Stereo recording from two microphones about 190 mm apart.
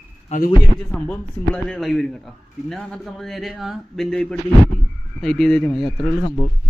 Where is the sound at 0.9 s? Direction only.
5° left (ahead or behind).